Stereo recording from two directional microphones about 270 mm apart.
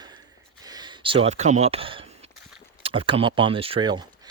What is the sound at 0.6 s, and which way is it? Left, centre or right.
Speech, centre.